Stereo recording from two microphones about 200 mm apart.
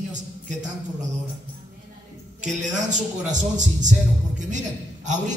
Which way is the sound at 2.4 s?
40° right (ahead or behind).